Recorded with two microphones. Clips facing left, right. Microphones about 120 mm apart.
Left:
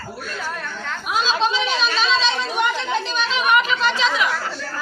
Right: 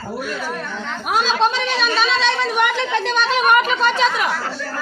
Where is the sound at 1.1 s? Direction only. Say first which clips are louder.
Right 3 dB; 55° right (ahead or behind).